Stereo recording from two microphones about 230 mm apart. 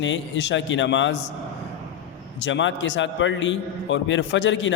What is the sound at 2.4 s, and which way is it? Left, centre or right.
A man's voice, left.